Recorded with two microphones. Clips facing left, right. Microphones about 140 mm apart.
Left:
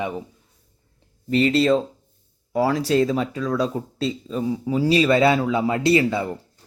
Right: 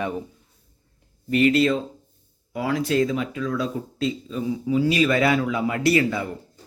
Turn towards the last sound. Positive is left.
turn(degrees=25)  # may be behind; listen again after turning